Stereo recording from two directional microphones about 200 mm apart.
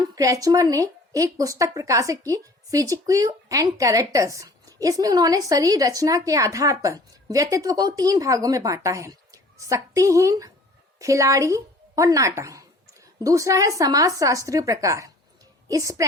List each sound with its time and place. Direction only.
0.0 s speech: 15° right (ahead or behind)